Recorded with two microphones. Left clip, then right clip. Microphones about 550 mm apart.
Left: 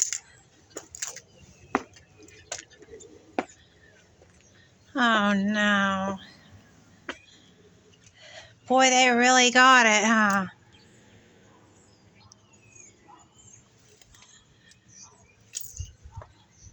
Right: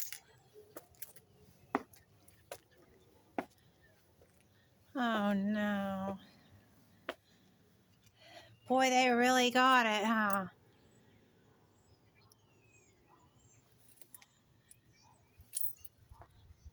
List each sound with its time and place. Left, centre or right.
1.7 s a sound: right
2.5 s vehicle: right
4.9 s speech: right
8.2 s speech: right